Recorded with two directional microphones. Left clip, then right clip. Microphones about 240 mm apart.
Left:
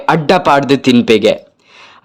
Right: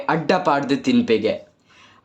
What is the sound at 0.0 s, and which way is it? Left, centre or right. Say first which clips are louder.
Speech: left 8 dB; left.